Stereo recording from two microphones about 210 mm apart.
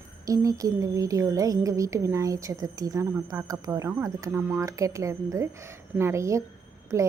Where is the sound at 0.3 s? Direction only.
15° right (ahead or behind).